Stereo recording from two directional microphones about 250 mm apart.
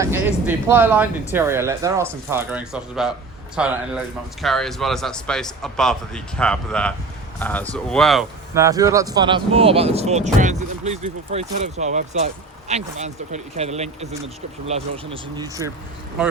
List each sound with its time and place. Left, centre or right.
0.4 s a man's voice: centre
8.5 s speech: centre